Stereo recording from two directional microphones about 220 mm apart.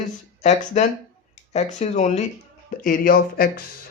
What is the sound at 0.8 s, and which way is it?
Speech, 30° left (ahead or behind).